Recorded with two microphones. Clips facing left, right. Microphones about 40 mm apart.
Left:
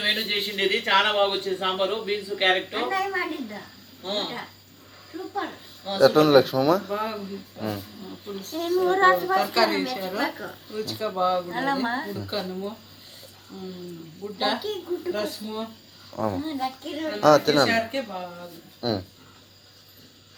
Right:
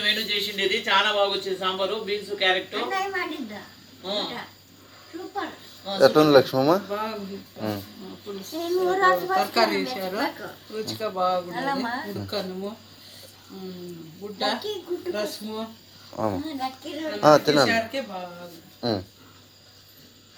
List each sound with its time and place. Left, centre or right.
0.0 s a man's voice: centre
8.9 s child singing: centre
9.2 s a man's voice: centre